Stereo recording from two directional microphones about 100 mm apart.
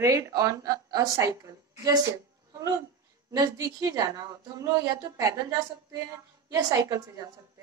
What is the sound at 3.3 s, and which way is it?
Speech, 40° right (ahead or behind).